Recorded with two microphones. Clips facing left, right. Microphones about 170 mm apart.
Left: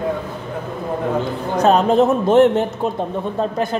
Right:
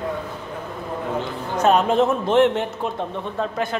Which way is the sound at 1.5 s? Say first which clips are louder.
Left 3 dB; 35° left (ahead or behind).